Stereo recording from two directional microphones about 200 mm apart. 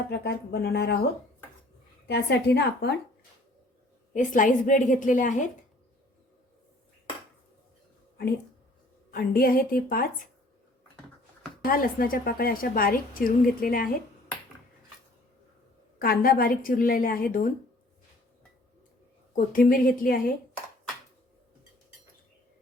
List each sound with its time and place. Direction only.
0.1 s a woman's voice: 55° left (ahead or behind)
2.0 s a woman's voice: 55° left (ahead or behind)
4.1 s a woman's voice: 40° left (ahead or behind)
9.1 s a woman's voice: 45° left (ahead or behind)
11.6 s a woman's voice: 45° left (ahead or behind)
16.0 s a woman's voice: 45° left (ahead or behind)
19.5 s a woman's voice: 45° left (ahead or behind)